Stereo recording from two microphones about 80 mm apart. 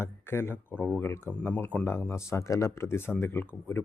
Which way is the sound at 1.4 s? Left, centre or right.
Centre.